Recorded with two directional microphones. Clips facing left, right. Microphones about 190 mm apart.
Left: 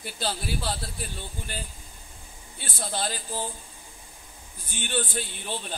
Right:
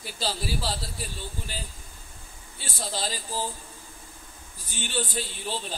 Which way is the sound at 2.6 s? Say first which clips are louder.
Left 1 dB; 55° left (ahead or behind).